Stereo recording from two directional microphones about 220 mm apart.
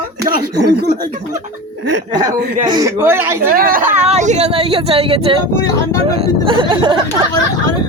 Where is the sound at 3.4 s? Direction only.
40° right (ahead or behind); by 5.4 s 25° right (ahead or behind).